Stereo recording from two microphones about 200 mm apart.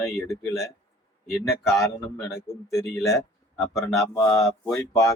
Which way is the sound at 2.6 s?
15° left (ahead or behind).